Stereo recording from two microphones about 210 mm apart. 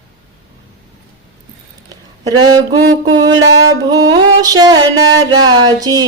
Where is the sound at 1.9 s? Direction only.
20° right (ahead or behind).